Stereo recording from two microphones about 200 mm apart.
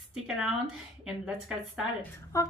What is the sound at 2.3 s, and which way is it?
Speech, 15° left (ahead or behind).